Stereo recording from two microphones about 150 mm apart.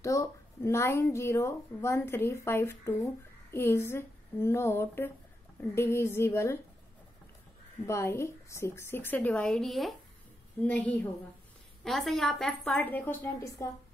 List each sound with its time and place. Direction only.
0.0 s speech: 20° left (ahead or behind)
7.8 s a woman's voice: 20° left (ahead or behind)